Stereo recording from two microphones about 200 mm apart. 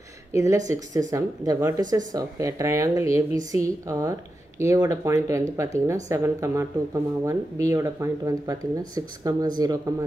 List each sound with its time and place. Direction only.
0.3 s speech: 15° right (ahead or behind)